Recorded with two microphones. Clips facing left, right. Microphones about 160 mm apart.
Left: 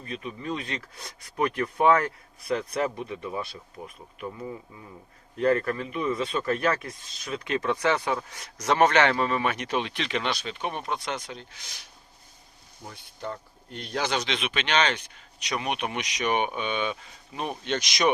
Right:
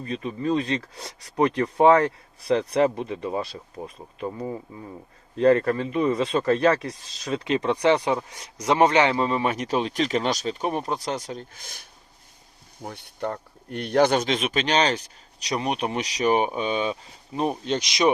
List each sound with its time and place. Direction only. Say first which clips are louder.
0.0 s speech: right 7 dB; 35° right (ahead or behind); by 11.9 s 50° right (ahead or behind)
12.8 s speech: right 6 dB; 65° right (ahead or behind); by 18.1 s 30° right (ahead or behind)